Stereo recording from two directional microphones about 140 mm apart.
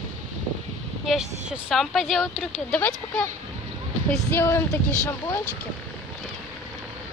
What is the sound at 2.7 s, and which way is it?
Speech, 10° left (ahead or behind).